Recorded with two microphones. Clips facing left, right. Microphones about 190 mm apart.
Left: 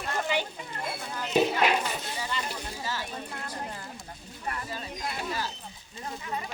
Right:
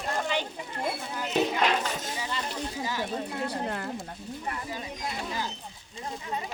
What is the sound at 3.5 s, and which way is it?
Speech, 65° right (ahead or behind).